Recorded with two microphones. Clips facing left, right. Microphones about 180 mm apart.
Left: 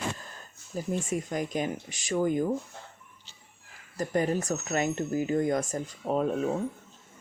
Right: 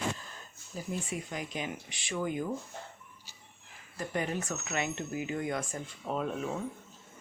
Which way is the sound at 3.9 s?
40° left (ahead or behind).